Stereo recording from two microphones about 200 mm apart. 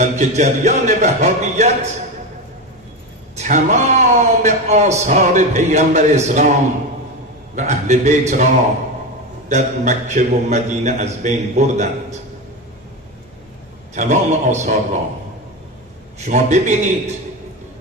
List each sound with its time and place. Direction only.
0.0 s a man's voice: 35° right (ahead or behind)
3.3 s a man's voice: 40° right (ahead or behind)
7.5 s a man's voice: 35° right (ahead or behind)
13.9 s a man's voice: 35° right (ahead or behind)
16.3 s a man's voice: 35° right (ahead or behind)